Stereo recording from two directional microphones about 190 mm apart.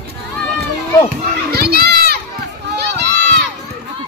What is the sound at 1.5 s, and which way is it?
Children playing, 55° right (ahead or behind).